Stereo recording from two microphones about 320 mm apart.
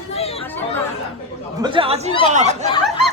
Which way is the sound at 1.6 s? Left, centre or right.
Centre.